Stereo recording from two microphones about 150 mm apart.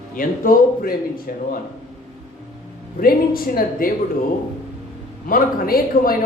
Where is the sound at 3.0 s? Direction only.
75° left (ahead or behind).